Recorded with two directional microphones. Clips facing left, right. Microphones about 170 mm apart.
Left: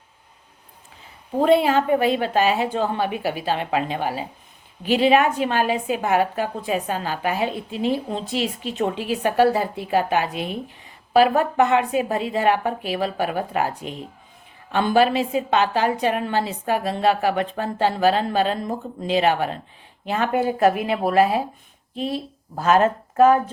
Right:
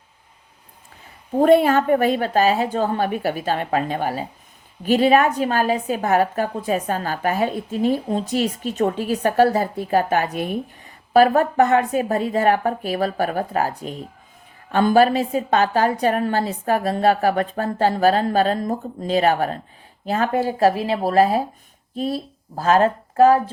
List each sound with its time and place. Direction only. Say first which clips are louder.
1.4 s a woman's voice: right 3 dB; 45° right (ahead or behind)